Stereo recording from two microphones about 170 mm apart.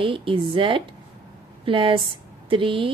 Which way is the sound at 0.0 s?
30° right (ahead or behind).